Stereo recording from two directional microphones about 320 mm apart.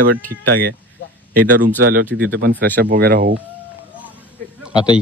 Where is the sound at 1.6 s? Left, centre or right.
Right.